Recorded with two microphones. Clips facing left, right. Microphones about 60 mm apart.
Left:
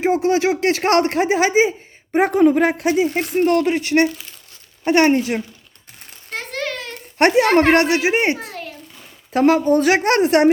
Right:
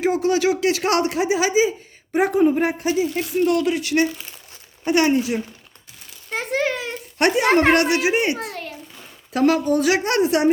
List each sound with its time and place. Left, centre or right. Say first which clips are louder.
0.0 s speech: left 2 dB; left
2.3 s speech: left 4 dB; left
6.3 s a sound: right 4 dB; centre
7.4 s a woman's voice: left 2 dB; centre
7.7 s speech: left 2 dB; left
8.4 s a sound: right 1 dB; centre
9.3 s speech: left 3 dB; left